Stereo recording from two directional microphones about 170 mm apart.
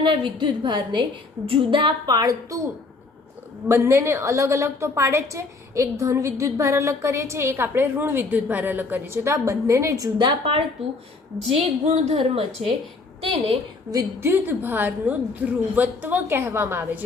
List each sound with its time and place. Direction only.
0.0 s speech: 30° right (ahead or behind)
3.7 s a woman's voice: 15° right (ahead or behind); by 12.7 s 35° right (ahead or behind)
13.9 s a woman's voice: 15° right (ahead or behind)